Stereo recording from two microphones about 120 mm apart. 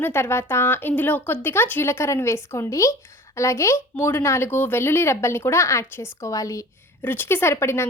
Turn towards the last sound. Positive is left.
turn(degrees=20)  # may be behind; listen again after turning